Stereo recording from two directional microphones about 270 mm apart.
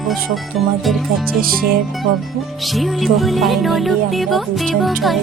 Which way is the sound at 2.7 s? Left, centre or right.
Centre.